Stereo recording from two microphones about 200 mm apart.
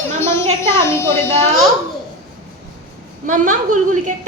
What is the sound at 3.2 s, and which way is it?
Speech, 40° right (ahead or behind).